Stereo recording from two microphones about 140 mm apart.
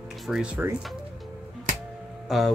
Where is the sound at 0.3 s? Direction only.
5° right (ahead or behind).